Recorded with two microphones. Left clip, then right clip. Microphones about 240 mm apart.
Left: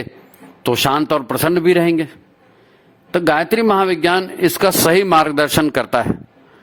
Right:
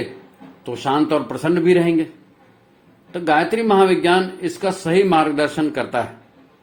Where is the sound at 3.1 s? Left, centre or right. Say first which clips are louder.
Left 2 dB; left.